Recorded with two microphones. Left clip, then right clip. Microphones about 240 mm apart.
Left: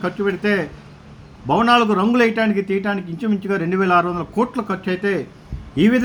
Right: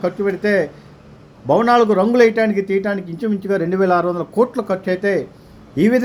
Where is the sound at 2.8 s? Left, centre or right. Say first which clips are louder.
Right 2 dB; left.